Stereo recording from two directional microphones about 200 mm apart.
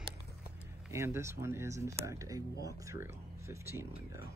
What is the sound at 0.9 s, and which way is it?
Speech, 15° right (ahead or behind).